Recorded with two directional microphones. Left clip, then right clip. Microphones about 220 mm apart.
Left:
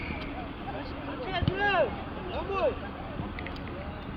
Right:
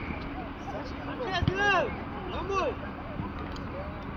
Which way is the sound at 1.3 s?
60° right (ahead or behind).